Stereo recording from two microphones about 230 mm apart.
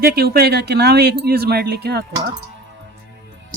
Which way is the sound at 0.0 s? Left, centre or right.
Right.